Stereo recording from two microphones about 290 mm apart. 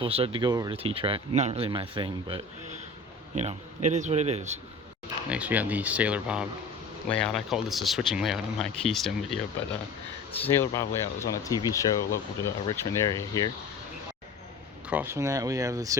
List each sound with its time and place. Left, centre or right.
0.0 s a man's voice: centre
5.3 s speech: centre
10.4 s speech: centre
14.8 s speech: centre